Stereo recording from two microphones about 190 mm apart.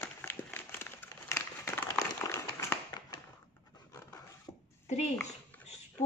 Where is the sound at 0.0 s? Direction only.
10° left (ahead or behind).